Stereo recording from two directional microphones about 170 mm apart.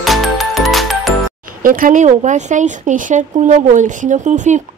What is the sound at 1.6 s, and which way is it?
Speech, 55° right (ahead or behind).